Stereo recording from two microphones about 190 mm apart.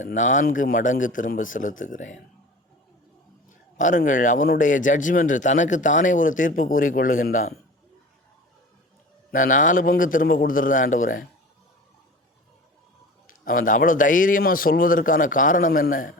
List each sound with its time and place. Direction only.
0.0 s speech: 40° left (ahead or behind)
3.8 s speech: 40° left (ahead or behind)
9.3 s speech: 45° left (ahead or behind)
13.2 s speech: 45° left (ahead or behind)